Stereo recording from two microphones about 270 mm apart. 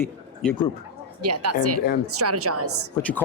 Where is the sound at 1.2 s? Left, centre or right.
Right.